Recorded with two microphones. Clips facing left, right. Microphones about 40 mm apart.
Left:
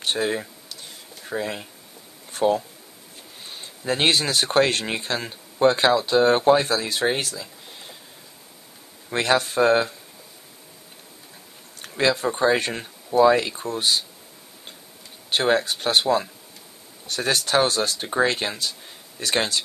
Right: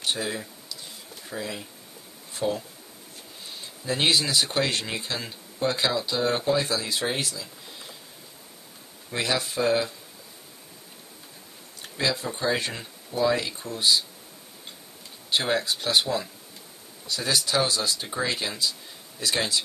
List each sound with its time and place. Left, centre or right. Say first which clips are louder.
0.0 s speech: left 5 dB; left
9.1 s speech: left 6 dB; left
11.8 s speech: left 6 dB; left
15.2 s speech: left 4 dB; left